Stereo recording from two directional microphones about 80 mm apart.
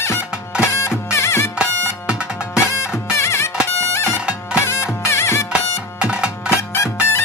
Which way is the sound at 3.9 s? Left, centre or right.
Left.